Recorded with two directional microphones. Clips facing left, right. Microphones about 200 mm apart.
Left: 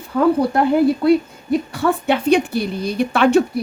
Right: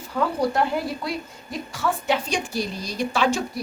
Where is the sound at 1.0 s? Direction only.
60° left (ahead or behind).